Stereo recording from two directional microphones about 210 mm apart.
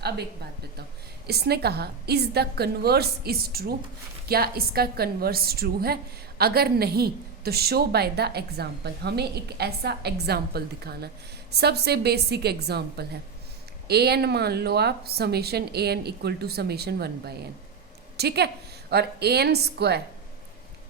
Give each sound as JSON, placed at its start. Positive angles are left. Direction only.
{"t": 1.3, "sound": "a woman's voice", "side_deg": -50}